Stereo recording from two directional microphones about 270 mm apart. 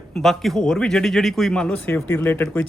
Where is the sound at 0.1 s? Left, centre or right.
Centre.